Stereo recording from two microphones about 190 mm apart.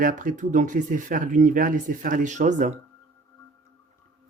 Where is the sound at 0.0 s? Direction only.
45° right (ahead or behind).